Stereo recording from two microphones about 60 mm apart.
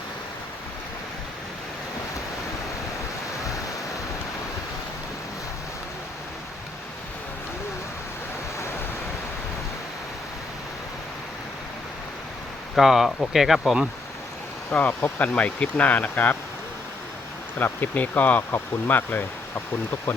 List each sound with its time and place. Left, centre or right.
12.7 s speech: centre
14.7 s speech: left
17.6 s speech: left